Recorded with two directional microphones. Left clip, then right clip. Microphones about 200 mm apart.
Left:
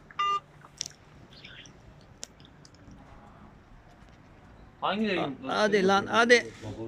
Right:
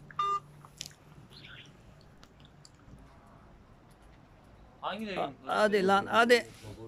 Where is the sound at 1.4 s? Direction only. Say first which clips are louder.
Left 3 dB; centre (ahead or behind).